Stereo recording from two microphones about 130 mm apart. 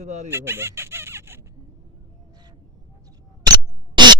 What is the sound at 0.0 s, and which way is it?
Speech, 60° right (ahead or behind).